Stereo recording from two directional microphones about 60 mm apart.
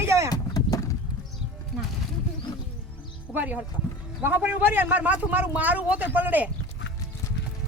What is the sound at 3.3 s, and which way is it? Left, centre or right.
A man's voice, right.